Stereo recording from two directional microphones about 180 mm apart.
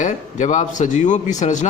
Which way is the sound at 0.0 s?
40° left (ahead or behind).